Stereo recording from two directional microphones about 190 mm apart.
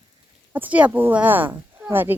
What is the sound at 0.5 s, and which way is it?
Speech, 10° right (ahead or behind).